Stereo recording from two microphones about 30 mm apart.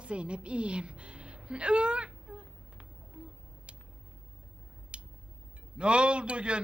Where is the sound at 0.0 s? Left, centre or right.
Right.